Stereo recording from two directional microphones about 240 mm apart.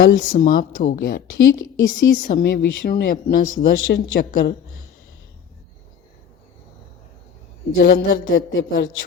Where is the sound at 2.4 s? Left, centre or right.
Left.